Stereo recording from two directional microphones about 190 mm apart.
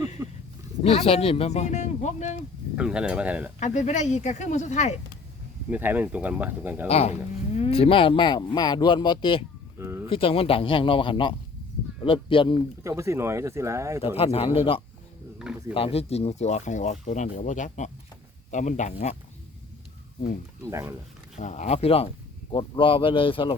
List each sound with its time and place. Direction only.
0.2 s speech: 15° right (ahead or behind)
0.8 s speech: 30° left (ahead or behind)
2.7 s speech: 5° right (ahead or behind)
3.6 s speech: 40° left (ahead or behind)
5.7 s speech: 10° right (ahead or behind)
6.8 s speech: 35° left (ahead or behind)
9.7 s a sound: 15° right (ahead or behind)
10.1 s speech: 30° left (ahead or behind)
12.8 s speech: 15° right (ahead or behind)
14.2 s speech: 30° left (ahead or behind)
20.7 s speech: 15° right (ahead or behind)
21.3 s speech: 40° left (ahead or behind)